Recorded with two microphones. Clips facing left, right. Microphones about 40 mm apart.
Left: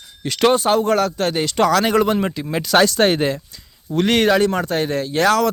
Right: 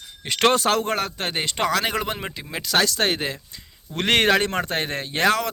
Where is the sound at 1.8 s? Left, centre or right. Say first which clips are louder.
Left 8 dB; centre.